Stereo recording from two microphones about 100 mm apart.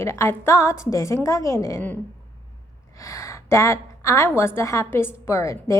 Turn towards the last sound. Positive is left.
turn(degrees=30)  # may be behind; listen again after turning